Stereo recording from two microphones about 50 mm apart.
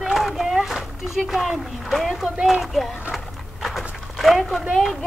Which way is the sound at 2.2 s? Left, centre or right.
Centre.